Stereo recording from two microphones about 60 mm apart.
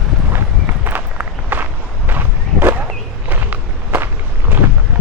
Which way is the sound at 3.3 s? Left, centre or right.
Right.